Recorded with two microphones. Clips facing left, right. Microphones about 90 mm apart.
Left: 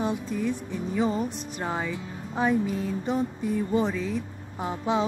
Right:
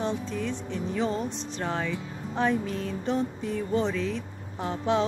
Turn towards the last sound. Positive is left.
turn(degrees=5)  # may be behind; listen again after turning